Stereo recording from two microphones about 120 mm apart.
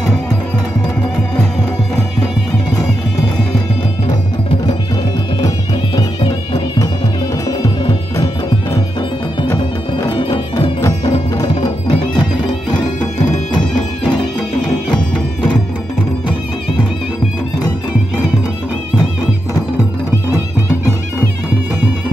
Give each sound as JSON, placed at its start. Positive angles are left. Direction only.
{"t": 7.4, "sound": "music", "side_deg": 30}
{"t": 11.3, "sound": "music", "side_deg": 30}